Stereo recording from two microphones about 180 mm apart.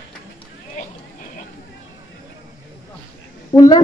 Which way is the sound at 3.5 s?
20° left (ahead or behind).